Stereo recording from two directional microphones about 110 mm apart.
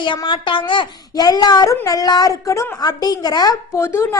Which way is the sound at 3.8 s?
25° left (ahead or behind).